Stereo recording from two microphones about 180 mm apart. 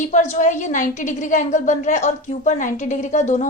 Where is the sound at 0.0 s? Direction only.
40° left (ahead or behind).